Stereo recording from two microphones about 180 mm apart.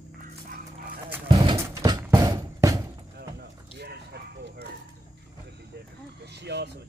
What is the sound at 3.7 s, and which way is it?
Bow-wow, 65° right (ahead or behind).